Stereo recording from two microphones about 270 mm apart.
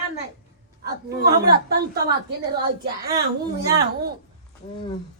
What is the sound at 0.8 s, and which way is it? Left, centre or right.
Speech, right.